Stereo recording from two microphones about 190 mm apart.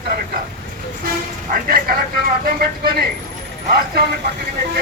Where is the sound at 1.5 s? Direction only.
50° right (ahead or behind).